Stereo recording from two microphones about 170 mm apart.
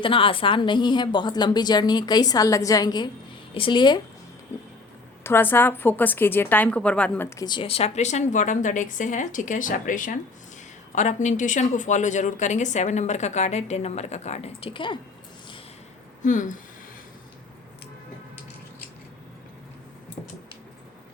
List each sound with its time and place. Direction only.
0.0 s a woman's voice: 30° left (ahead or behind)
4.5 s music: 15° left (ahead or behind)
5.2 s a woman's voice: 10° left (ahead or behind); by 14.9 s 30° left (ahead or behind)
16.2 s speech: 50° left (ahead or behind)